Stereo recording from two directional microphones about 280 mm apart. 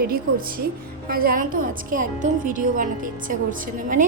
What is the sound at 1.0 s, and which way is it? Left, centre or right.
A woman's voice, right.